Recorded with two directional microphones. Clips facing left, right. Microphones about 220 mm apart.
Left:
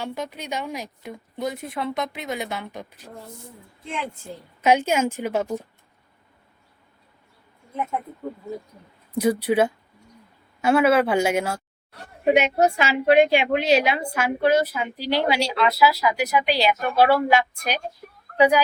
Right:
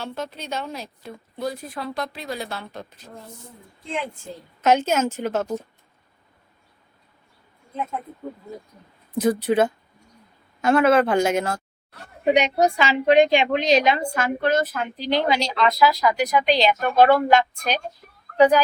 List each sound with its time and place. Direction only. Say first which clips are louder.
0.0 s a woman's voice: left 1 dB; 15° left (ahead or behind)
4.6 s a woman's voice: even; 10° left (ahead or behind)
9.1 s a woman's voice: even; 10° left (ahead or behind)